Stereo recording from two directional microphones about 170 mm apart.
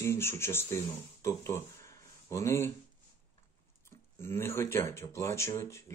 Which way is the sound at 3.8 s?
15° left (ahead or behind).